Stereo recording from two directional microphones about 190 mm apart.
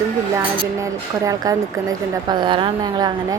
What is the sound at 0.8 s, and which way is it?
A woman's voice, 15° right (ahead or behind).